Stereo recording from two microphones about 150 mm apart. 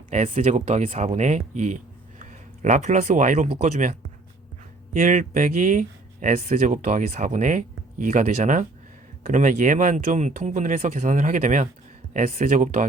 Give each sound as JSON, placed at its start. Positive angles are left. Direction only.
{"t": 0.1, "sound": "speech", "side_deg": -50}
{"t": 4.9, "sound": "speech", "side_deg": -60}